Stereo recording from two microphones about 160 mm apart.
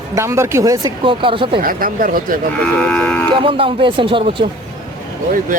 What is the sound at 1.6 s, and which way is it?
Speech, 60° right (ahead or behind).